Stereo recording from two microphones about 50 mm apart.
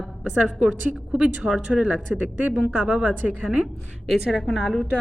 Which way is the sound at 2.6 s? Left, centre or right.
Right.